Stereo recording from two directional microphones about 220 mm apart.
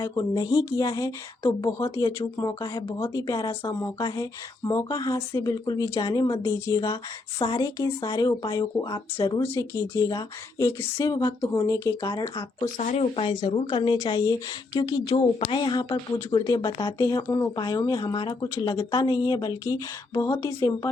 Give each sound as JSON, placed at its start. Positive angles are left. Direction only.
{"t": 0.0, "sound": "speech", "side_deg": 20}
{"t": 12.7, "sound": "speech", "side_deg": 35}